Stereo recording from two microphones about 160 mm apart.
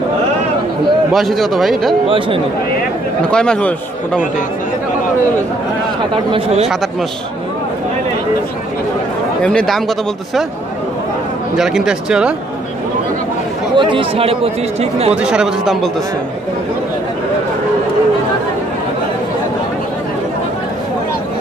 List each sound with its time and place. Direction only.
1.1 s speech: centre (ahead or behind)
2.0 s speech: 35° right (ahead or behind)
3.3 s speech: 5° left (ahead or behind)
6.3 s speech: 40° right (ahead or behind)
6.7 s speech: centre (ahead or behind)
9.4 s speech: 5° left (ahead or behind)
11.5 s speech: 5° right (ahead or behind)
13.7 s speech: 35° right (ahead or behind)
15.1 s speech: 5° right (ahead or behind)